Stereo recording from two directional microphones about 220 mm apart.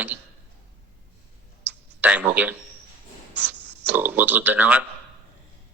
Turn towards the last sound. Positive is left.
turn(degrees=-5)  # may be behind; listen again after turning